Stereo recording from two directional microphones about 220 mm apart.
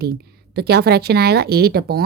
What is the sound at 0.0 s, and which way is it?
A woman's voice, 45° right (ahead or behind).